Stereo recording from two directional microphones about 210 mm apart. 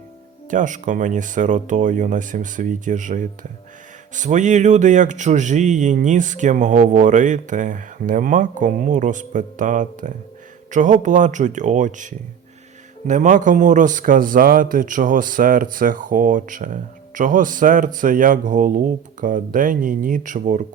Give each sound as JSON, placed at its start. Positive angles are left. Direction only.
{"t": 0.5, "sound": "speech", "side_deg": -35}